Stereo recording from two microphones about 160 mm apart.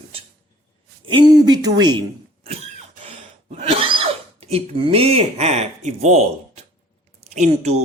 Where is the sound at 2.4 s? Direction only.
40° right (ahead or behind).